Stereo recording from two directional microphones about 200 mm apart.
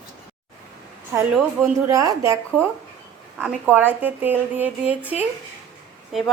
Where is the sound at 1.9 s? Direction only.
15° right (ahead or behind).